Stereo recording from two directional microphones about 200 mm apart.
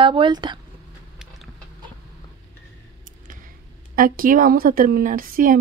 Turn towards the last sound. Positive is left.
turn(degrees=-45)  # may be behind; listen again after turning